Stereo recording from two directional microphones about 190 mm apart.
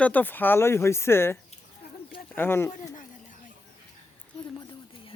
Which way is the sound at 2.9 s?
45° left (ahead or behind).